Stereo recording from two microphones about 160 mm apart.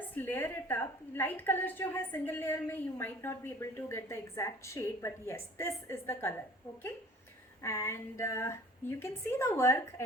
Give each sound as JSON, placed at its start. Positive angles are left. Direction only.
{"t": 0.1, "sound": "a woman's voice", "side_deg": 10}
{"t": 7.6, "sound": "a woman's voice", "side_deg": 15}